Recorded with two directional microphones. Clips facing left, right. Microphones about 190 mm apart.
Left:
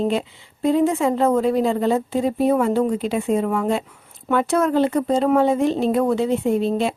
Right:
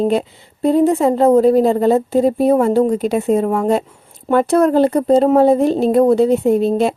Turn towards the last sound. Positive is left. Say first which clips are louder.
# right 5 dB
turn(degrees=-40)  # may be behind; listen again after turning